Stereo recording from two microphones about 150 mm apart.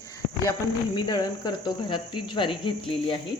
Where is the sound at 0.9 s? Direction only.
30° left (ahead or behind).